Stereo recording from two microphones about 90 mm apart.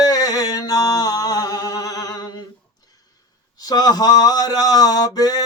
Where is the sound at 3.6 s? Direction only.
45° left (ahead or behind).